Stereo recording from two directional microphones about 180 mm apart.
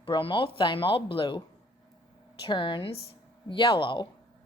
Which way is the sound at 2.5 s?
25° left (ahead or behind).